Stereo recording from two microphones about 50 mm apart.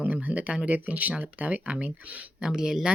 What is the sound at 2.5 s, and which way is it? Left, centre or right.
Speech, centre.